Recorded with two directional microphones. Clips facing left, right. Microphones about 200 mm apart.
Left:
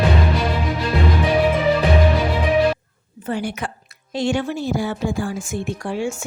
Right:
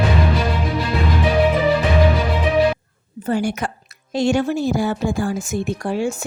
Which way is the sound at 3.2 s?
45° right (ahead or behind).